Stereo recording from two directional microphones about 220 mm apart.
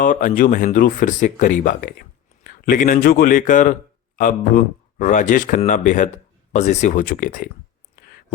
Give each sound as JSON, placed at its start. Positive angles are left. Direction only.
{"t": 0.0, "sound": "speech", "side_deg": 35}